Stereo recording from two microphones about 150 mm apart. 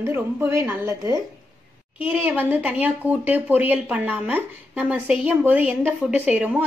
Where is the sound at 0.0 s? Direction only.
15° right (ahead or behind).